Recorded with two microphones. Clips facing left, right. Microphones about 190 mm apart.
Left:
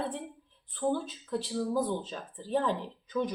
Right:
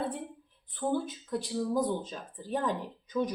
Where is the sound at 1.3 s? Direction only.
15° right (ahead or behind).